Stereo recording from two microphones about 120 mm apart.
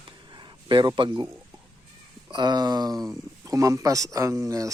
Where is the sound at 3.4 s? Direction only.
30° right (ahead or behind).